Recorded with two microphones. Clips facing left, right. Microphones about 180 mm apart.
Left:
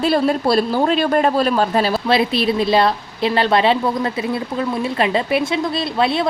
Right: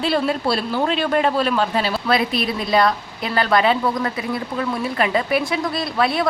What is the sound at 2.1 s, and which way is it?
A woman's voice, 30° left (ahead or behind).